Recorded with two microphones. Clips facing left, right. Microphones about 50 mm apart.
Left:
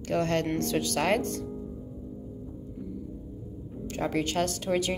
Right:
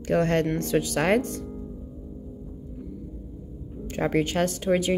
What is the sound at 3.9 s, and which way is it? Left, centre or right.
Speech, right.